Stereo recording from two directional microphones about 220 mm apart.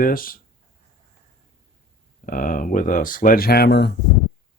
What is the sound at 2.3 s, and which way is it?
Speech, 40° left (ahead or behind).